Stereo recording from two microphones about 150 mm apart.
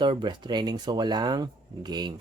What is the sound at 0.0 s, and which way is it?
Speech, 30° right (ahead or behind).